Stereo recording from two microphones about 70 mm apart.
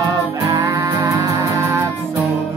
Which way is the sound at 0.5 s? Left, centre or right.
Right.